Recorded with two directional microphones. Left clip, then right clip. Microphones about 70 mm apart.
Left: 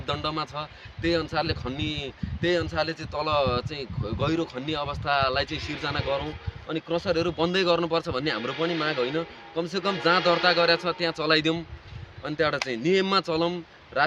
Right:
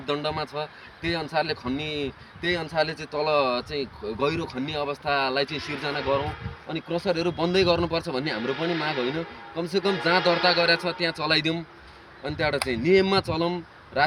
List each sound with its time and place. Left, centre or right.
0.0 s speech: left